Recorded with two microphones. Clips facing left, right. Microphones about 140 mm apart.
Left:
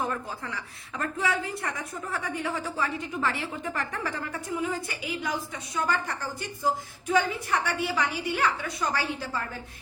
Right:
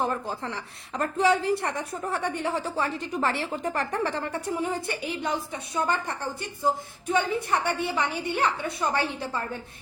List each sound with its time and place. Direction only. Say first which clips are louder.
0.0 s a woman's voice: right 3 dB; 30° right (ahead or behind)